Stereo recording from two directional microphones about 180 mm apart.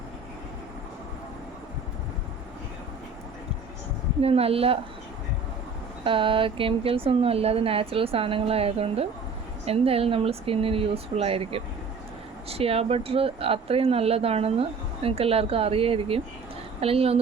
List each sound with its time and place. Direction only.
4.2 s speech: 35° right (ahead or behind)
6.1 s speech: 30° right (ahead or behind)